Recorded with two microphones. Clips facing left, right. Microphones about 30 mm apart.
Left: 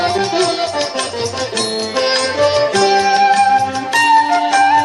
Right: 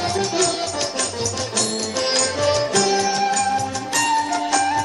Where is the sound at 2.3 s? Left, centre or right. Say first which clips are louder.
Left 7 dB; left.